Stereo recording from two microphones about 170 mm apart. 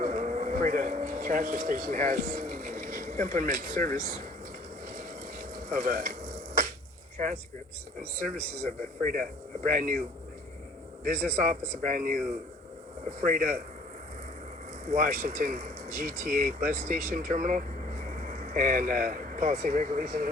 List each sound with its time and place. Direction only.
0.0 s vehicle: 45° right (ahead or behind)
4.9 s a sound: 50° right (ahead or behind)
9.6 s speech: 50° right (ahead or behind)
11.0 s speech: 50° right (ahead or behind)
14.8 s speech: 50° right (ahead or behind)